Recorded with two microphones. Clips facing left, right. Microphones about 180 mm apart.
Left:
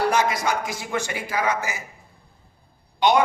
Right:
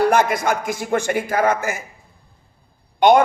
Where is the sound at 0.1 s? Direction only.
55° right (ahead or behind).